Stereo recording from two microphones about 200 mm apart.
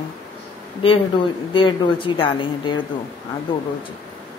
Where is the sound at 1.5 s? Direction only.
25° left (ahead or behind).